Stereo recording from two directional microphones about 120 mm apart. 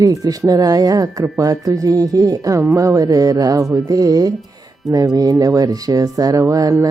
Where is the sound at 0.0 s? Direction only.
30° right (ahead or behind).